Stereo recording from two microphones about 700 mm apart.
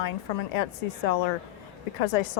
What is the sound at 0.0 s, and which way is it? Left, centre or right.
Speech, left.